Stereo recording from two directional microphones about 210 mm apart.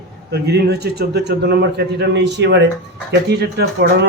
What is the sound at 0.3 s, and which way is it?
A man's voice, 50° right (ahead or behind).